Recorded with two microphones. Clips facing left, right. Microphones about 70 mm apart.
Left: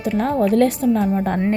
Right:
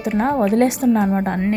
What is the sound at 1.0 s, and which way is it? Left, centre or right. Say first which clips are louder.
Speech: right 1 dB; right.